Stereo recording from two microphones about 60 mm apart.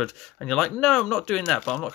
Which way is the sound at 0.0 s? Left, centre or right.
Centre.